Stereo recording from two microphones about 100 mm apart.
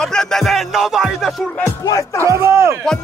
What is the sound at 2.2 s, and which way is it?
Speech, 25° right (ahead or behind).